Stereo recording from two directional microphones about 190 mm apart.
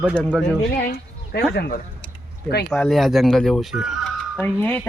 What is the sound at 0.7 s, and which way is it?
Speech, 55° left (ahead or behind).